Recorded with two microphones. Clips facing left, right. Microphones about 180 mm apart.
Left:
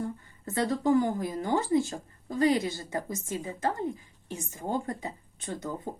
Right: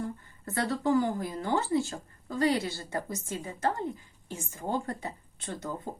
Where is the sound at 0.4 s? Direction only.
20° left (ahead or behind).